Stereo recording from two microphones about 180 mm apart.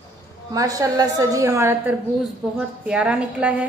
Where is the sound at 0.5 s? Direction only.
20° right (ahead or behind).